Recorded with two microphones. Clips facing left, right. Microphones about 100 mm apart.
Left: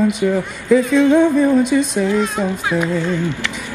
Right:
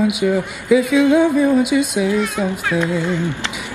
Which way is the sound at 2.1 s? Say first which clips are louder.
Left 1 dB; 30° left (ahead or behind).